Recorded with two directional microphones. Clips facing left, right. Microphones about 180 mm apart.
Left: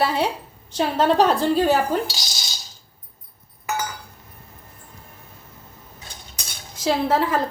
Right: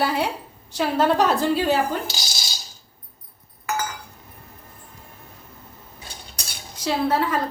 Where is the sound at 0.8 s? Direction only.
30° left (ahead or behind).